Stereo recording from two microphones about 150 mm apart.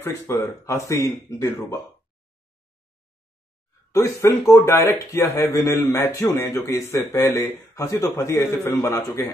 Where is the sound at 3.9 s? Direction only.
20° left (ahead or behind).